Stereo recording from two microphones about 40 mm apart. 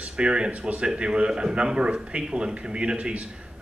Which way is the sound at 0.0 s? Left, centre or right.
Right.